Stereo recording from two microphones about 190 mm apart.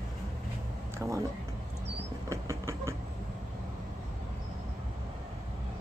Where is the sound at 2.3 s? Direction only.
15° right (ahead or behind).